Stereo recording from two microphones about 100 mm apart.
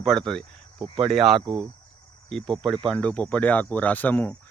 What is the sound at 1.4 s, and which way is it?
Speech, 50° right (ahead or behind).